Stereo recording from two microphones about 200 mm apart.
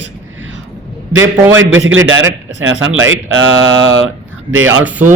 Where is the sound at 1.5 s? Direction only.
75° right (ahead or behind).